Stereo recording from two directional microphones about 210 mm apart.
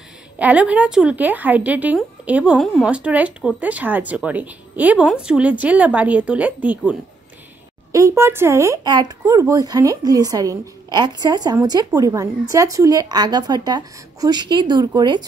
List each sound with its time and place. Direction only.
0.4 s speech: 5° right (ahead or behind)
7.9 s speech: 15° right (ahead or behind)